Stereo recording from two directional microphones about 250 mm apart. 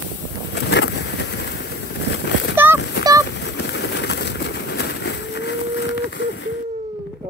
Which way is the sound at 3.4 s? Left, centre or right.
Left.